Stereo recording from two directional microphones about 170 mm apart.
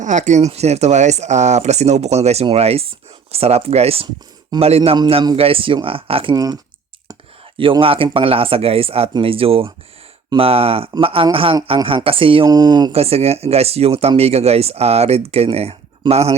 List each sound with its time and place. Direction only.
0.0 s speech: 45° right (ahead or behind)
6.3 s speech: 20° right (ahead or behind)
7.6 s speech: 30° right (ahead or behind)
12.9 s speech: 35° right (ahead or behind)